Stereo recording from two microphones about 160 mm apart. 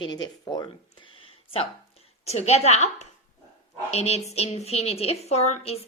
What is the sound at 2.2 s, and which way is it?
A woman's voice, 40° left (ahead or behind).